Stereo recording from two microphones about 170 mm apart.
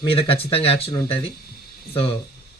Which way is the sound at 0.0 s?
35° left (ahead or behind).